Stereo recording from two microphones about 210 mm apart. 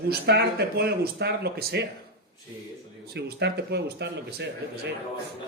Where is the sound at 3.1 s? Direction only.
55° right (ahead or behind).